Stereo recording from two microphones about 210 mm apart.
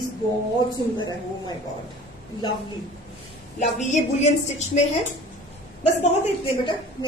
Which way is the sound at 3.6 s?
35° left (ahead or behind).